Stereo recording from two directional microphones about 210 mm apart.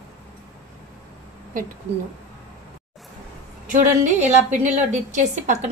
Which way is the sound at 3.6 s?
35° right (ahead or behind).